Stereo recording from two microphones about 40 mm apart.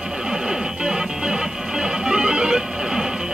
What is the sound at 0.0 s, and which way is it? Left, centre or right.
Music, centre.